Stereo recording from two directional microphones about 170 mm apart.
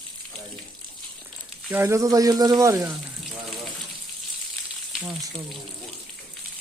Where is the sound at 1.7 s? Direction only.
15° right (ahead or behind).